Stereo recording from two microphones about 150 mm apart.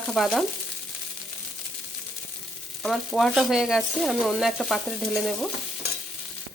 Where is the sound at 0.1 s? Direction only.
Centre (ahead or behind).